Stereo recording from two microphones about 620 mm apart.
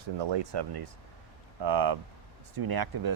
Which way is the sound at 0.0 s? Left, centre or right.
Right.